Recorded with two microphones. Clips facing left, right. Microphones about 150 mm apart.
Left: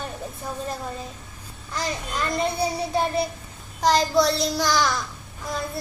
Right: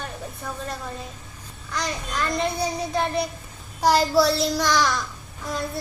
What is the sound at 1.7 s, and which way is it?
Speech, 25° left (ahead or behind).